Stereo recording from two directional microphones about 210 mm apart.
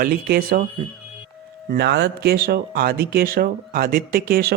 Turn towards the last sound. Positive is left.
turn(degrees=-45)  # may be behind; listen again after turning